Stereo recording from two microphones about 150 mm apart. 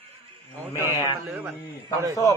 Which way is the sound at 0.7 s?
15° right (ahead or behind).